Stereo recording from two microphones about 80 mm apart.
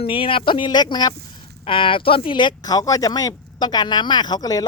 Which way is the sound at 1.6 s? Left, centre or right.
Left.